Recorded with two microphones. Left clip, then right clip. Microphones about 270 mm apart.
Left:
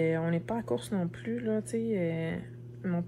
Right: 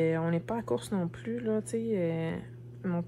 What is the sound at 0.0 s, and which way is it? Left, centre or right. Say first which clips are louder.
Speech: right 1 dB; centre.